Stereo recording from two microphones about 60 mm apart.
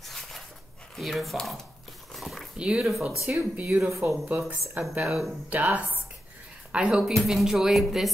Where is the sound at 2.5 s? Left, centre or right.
Centre.